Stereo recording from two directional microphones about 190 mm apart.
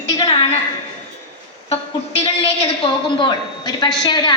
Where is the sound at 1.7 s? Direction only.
30° left (ahead or behind).